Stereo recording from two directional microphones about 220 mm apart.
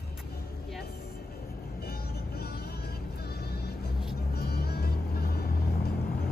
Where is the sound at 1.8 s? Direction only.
45° left (ahead or behind).